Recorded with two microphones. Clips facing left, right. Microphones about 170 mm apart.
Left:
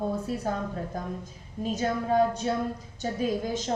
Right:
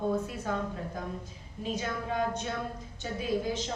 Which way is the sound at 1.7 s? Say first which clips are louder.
Left 8 dB; 40° left (ahead or behind).